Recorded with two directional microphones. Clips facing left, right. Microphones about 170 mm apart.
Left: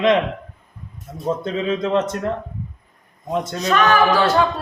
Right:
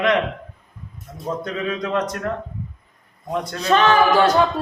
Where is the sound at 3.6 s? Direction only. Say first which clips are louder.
Right 1 dB; 30° right (ahead or behind).